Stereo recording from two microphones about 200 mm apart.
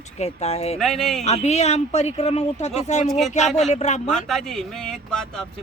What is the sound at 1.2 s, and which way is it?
Speech, 35° left (ahead or behind).